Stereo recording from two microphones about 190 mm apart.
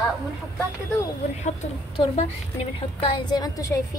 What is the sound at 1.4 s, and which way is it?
A woman's voice, 35° left (ahead or behind).